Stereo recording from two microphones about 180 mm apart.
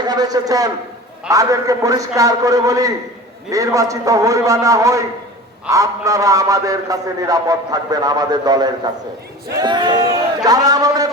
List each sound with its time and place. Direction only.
0.0 s a man's voice: 20° right (ahead or behind)